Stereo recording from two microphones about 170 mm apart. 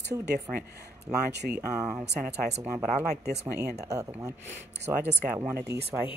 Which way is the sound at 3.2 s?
70° right (ahead or behind).